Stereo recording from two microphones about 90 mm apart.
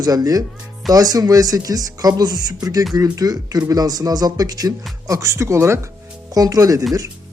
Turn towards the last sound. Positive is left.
turn(degrees=-40)  # may be behind; listen again after turning